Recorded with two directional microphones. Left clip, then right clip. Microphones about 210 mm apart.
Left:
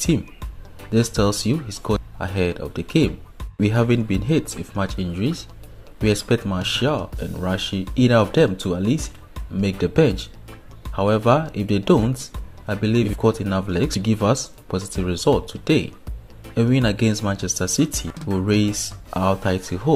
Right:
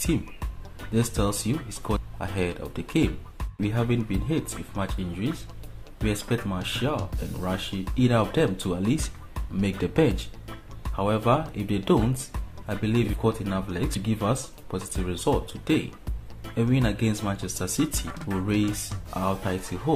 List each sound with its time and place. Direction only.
0.9 s speech: 25° left (ahead or behind)
18.0 s speech: centre (ahead or behind)
18.5 s speech: 25° left (ahead or behind)